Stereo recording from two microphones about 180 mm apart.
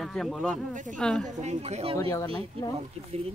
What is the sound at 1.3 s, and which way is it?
Speech, 40° right (ahead or behind).